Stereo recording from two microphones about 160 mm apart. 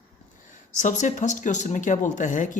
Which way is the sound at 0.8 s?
50° left (ahead or behind).